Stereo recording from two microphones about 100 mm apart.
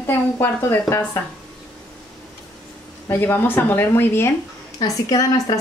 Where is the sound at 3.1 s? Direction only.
20° left (ahead or behind).